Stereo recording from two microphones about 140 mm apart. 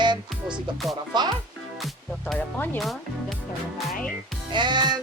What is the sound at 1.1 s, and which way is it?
Speech, 30° right (ahead or behind).